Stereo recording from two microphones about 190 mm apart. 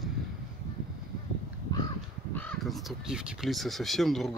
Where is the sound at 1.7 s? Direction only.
20° left (ahead or behind).